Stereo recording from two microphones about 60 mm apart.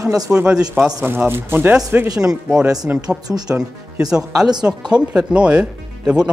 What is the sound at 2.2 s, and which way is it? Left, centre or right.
Speech, centre.